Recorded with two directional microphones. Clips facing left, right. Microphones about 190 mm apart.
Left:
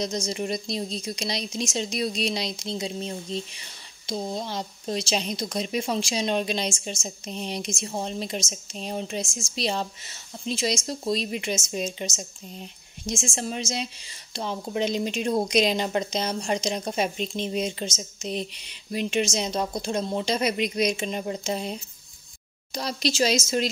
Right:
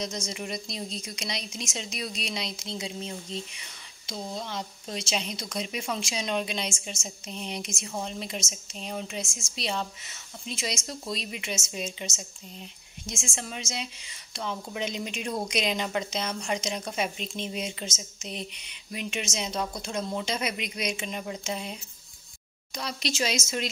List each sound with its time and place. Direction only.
0.0 s a woman's voice: 35° left (ahead or behind)
13.1 s a woman's voice: 35° left (ahead or behind)